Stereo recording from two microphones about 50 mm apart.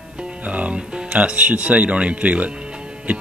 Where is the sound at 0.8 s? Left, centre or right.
Centre.